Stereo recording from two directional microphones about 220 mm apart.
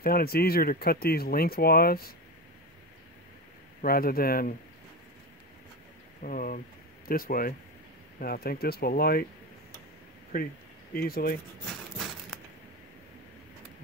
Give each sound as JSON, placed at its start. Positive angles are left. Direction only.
{"t": 0.0, "sound": "speech", "side_deg": 45}
{"t": 3.8, "sound": "speech", "side_deg": 40}
{"t": 6.2, "sound": "speech", "side_deg": 40}
{"t": 11.0, "sound": "speech", "side_deg": 45}